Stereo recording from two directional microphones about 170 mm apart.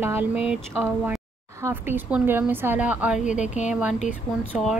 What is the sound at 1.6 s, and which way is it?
A woman's voice, 15° right (ahead or behind).